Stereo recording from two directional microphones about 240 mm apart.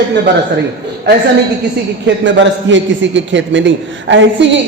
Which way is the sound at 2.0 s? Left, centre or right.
Right.